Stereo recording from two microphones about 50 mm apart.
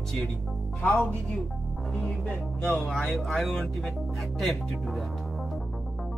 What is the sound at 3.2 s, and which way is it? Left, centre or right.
Music, centre.